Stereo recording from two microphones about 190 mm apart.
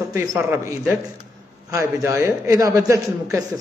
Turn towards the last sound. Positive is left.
turn(degrees=-15)  # may be behind; listen again after turning